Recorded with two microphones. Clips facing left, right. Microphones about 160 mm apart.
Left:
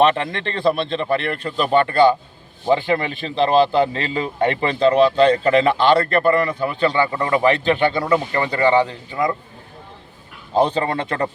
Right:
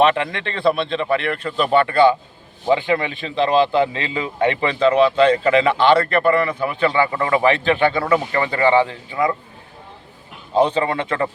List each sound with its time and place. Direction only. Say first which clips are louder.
0.0 s a man's voice: even; 35° left (ahead or behind)
10.6 s a man's voice: right 1 dB; 35° left (ahead or behind)